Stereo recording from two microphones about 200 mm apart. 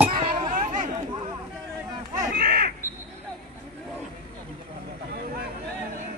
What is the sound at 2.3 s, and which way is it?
Crow, 50° right (ahead or behind).